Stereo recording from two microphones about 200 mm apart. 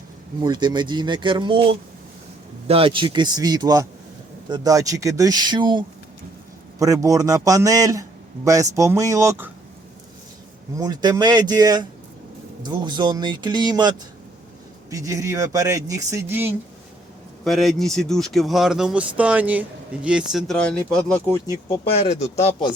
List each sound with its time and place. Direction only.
0.4 s speech: 20° right (ahead or behind)
10.8 s speech: 20° right (ahead or behind)
17.4 s speech: centre (ahead or behind)
21.9 s speech: 30° left (ahead or behind)